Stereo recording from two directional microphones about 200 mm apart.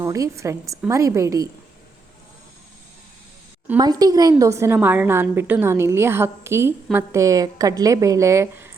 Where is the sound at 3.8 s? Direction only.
20° right (ahead or behind).